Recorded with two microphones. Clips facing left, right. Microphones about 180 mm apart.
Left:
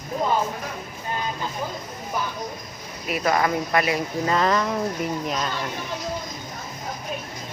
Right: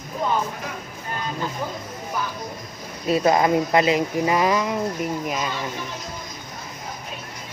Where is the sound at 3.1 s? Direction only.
25° right (ahead or behind); by 5.5 s 5° right (ahead or behind).